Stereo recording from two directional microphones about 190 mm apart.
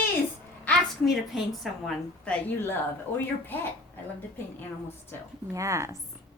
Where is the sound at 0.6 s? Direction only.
Centre (ahead or behind).